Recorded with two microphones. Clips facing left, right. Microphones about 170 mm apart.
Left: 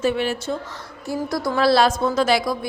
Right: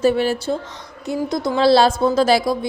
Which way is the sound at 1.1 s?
20° right (ahead or behind).